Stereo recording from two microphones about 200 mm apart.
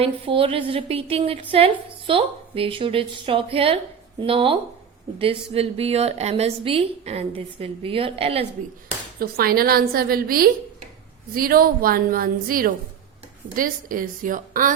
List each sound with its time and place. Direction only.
0.0 s a woman's voice: 25° right (ahead or behind)
9.1 s a woman's voice: 50° right (ahead or behind)